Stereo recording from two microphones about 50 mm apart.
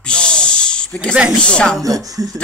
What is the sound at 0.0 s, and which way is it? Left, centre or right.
Snake, centre.